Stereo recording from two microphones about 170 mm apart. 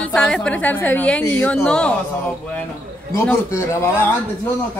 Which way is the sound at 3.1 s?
15° left (ahead or behind).